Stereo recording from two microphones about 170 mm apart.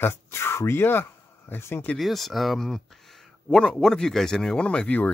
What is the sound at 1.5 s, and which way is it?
Speech, 15° left (ahead or behind).